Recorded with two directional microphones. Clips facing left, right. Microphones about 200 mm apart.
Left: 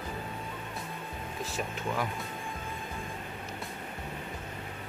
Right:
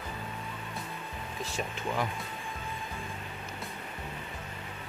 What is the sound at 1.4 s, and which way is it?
Speech, centre (ahead or behind).